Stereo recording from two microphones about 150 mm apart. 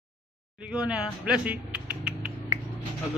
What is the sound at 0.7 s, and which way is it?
Speech, 5° right (ahead or behind).